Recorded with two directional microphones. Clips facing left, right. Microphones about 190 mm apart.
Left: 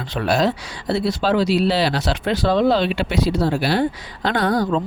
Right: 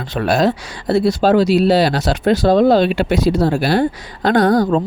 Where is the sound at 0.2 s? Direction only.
50° right (ahead or behind).